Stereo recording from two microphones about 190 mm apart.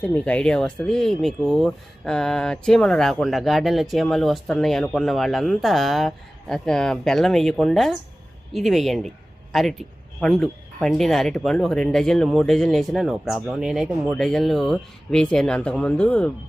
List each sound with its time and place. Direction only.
0.0 s speech: 5° left (ahead or behind)